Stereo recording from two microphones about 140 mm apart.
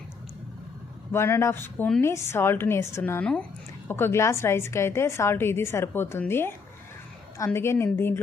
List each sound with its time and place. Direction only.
1.1 s a woman's voice: 15° left (ahead or behind)